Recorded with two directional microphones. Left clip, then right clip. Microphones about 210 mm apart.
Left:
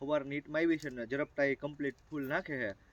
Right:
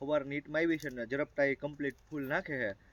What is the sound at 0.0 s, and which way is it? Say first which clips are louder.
Speech: right 1 dB; centre (ahead or behind).